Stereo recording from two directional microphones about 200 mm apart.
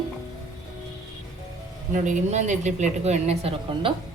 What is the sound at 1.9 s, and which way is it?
A woman's voice, 40° right (ahead or behind).